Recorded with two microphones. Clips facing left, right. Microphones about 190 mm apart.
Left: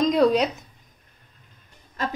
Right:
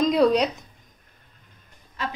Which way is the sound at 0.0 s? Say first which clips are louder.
Even; centre (ahead or behind).